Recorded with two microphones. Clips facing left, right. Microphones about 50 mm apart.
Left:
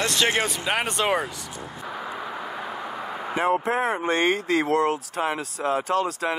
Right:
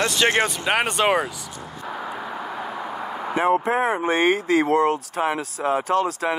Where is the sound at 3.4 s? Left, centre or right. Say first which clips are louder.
Right 3 dB; centre.